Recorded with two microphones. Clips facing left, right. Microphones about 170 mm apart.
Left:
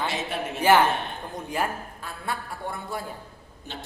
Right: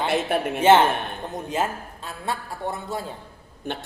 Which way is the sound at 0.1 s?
60° right (ahead or behind).